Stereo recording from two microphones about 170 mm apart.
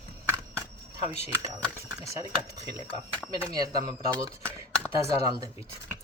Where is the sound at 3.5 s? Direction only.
25° right (ahead or behind).